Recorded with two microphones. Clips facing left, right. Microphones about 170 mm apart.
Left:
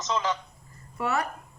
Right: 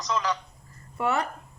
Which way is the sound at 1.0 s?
25° right (ahead or behind).